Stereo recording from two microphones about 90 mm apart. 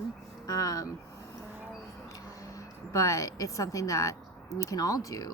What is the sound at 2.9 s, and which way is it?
Speech, 35° left (ahead or behind).